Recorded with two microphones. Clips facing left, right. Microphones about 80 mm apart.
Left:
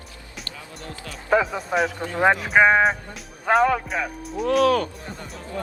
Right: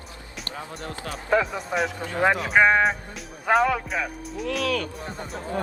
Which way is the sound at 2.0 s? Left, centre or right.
Left.